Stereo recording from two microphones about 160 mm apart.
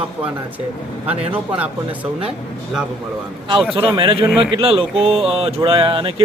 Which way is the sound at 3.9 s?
35° right (ahead or behind).